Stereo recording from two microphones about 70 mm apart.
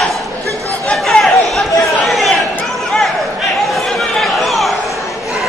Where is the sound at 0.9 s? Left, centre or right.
Centre.